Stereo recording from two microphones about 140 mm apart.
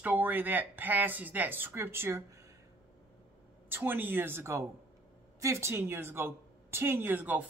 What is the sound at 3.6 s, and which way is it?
Speech, 15° right (ahead or behind).